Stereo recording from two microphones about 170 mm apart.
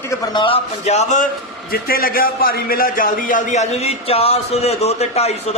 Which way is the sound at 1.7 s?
60° left (ahead or behind).